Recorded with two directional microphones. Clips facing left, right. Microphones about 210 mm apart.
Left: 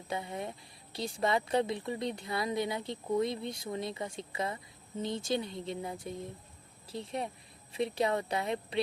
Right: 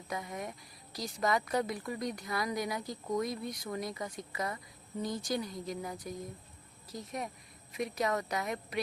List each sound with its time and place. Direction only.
0.1 s a woman's voice: 30° left (ahead or behind)